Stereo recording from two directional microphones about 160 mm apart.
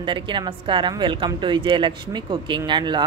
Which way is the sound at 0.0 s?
30° right (ahead or behind).